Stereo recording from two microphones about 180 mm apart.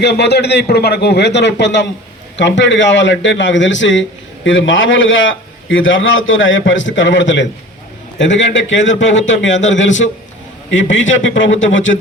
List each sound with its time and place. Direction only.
0.0 s a man's voice: 65° left (ahead or behind)
2.3 s a man's voice: 85° left